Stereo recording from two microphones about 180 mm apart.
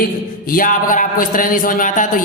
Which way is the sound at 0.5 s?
50° left (ahead or behind).